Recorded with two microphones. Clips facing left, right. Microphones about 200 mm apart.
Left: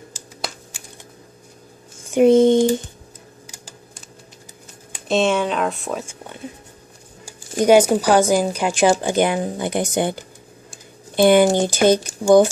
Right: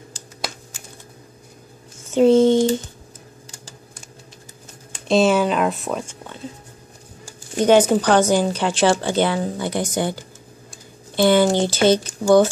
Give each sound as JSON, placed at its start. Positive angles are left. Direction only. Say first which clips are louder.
{"t": 2.0, "sound": "a sound", "louder": "left 1 dB", "side_deg": 15}
{"t": 5.0, "sound": "speech", "louder": "right 2 dB", "side_deg": 0}
{"t": 7.5, "sound": "speech", "louder": "left 1 dB", "side_deg": 10}